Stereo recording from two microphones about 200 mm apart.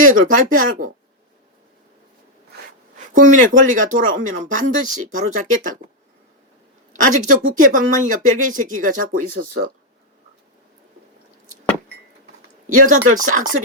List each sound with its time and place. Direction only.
0.0 s speech: 40° right (ahead or behind)
3.1 s speech: 40° right (ahead or behind)
6.9 s speech: 40° right (ahead or behind)
12.6 s speech: 40° right (ahead or behind)